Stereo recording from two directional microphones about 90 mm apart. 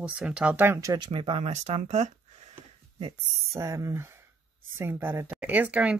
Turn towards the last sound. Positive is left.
turn(degrees=-15)  # may be behind; listen again after turning